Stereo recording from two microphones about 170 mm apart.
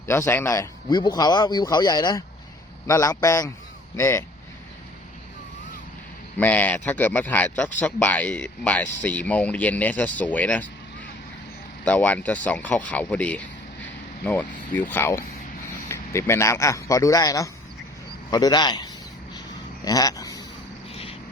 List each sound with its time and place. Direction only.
0.0 s speech: 15° left (ahead or behind)
6.3 s speech: 10° left (ahead or behind)
11.9 s speech: 10° left (ahead or behind)
20.9 s a sound: 35° left (ahead or behind)